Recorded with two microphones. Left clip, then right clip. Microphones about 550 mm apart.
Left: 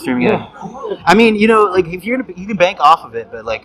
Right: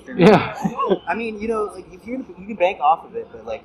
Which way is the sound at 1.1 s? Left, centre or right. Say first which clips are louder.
Left 14 dB; left.